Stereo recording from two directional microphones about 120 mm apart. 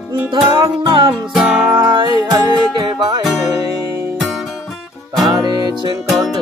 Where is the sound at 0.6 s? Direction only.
35° right (ahead or behind).